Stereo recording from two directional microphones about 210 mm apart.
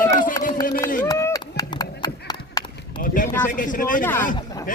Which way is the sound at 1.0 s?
15° left (ahead or behind).